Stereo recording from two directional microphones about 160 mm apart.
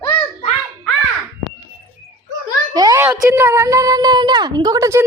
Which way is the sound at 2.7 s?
20° right (ahead or behind).